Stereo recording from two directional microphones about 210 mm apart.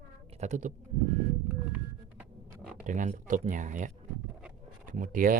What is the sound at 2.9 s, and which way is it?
Speech, 35° right (ahead or behind).